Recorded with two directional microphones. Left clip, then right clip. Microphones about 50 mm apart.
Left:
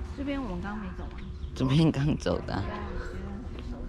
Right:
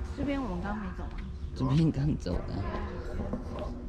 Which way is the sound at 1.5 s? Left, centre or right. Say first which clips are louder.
Left 4 dB; right.